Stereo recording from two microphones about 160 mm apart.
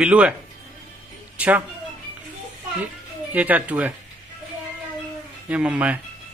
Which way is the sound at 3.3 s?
10° right (ahead or behind).